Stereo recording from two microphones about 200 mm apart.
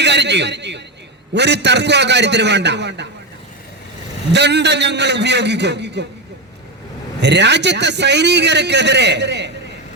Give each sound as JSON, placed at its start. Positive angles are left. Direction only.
{"t": 0.0, "sound": "a man's voice", "side_deg": -60}
{"t": 4.3, "sound": "a man's voice", "side_deg": -60}
{"t": 7.2, "sound": "a man's voice", "side_deg": -60}